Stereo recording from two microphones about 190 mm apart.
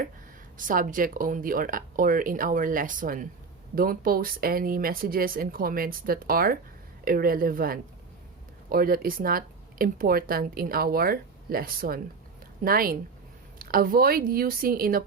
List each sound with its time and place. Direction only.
0.5 s speech: 45° right (ahead or behind)